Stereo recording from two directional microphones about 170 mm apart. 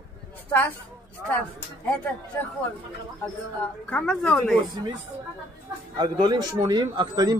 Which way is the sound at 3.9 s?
5° left (ahead or behind).